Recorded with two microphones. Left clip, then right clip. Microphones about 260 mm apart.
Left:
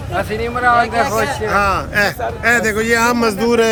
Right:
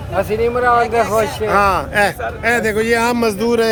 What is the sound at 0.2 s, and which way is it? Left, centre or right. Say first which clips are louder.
Speech: right 3 dB; right.